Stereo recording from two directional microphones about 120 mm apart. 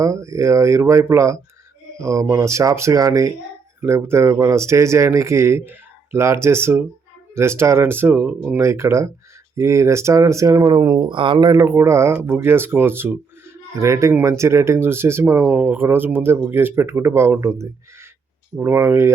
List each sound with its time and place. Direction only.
0.0 s speech: 25° right (ahead or behind)
11.1 s speech: 45° right (ahead or behind); by 19.1 s 20° right (ahead or behind)